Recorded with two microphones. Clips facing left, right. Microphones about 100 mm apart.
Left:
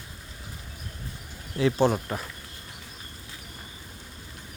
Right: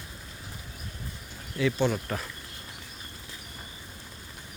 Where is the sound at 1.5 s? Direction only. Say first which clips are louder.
Left 4 dB; 35° left (ahead or behind).